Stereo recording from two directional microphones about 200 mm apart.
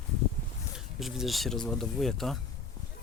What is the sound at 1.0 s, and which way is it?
Speech, centre (ahead or behind).